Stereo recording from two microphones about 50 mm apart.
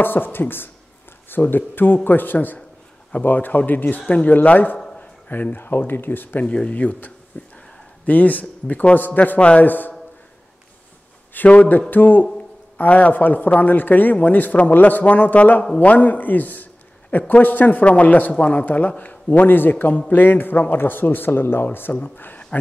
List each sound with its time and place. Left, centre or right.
0.0 s a man's voice: left
6.4 s a man's voice: left
9.4 s speech: left
9.7 s a man's voice: left
11.3 s a man's voice: left